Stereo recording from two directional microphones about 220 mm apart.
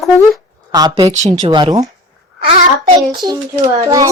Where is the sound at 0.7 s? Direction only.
15° right (ahead or behind).